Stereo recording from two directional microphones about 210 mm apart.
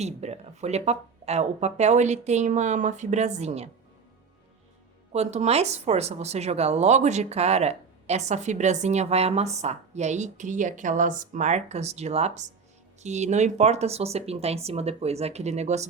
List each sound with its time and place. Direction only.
0.0 s speech: 30° right (ahead or behind)
5.1 s speech: 30° right (ahead or behind)